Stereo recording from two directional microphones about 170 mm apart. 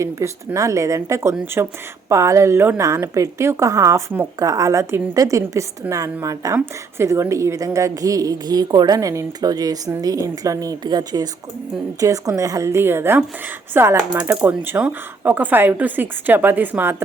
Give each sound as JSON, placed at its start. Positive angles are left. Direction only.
{"t": 0.0, "sound": "a woman's voice", "side_deg": -20}